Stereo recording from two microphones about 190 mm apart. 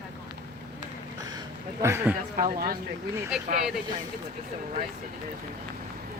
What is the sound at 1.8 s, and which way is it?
Speech, 10° right (ahead or behind).